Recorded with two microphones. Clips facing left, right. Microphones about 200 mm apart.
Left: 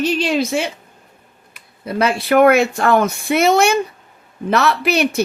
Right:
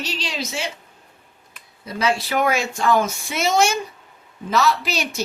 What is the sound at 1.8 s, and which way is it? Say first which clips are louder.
A woman's voice: left 5 dB; 60° left (ahead or behind).